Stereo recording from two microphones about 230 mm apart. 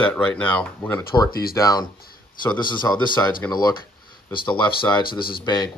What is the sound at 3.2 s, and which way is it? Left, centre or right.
Speech, centre.